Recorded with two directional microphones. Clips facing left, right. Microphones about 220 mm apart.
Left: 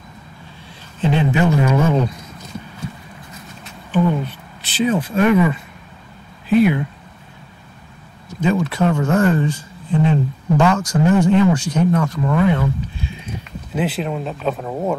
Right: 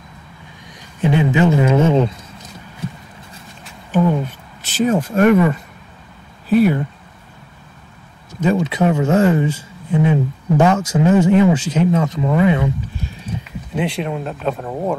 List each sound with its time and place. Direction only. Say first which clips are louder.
1.3 s a sound: right 3 dB; 20° right (ahead or behind)
3.9 s a sound: right 1 dB; 45° right (ahead or behind)
6.5 s speech: even; 40° right (ahead or behind)
8.6 s speech: right 2 dB; 20° right (ahead or behind)
9.8 s speech: right 1 dB; 10° right (ahead or behind)
13.4 s speech: even; 5° left (ahead or behind)